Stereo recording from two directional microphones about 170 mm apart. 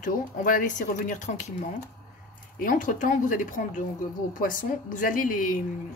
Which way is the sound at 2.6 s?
50° left (ahead or behind).